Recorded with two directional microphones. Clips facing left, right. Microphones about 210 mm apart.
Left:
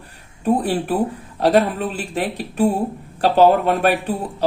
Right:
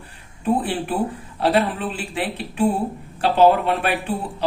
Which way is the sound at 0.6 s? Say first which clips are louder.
Left 3 dB; 40° left (ahead or behind).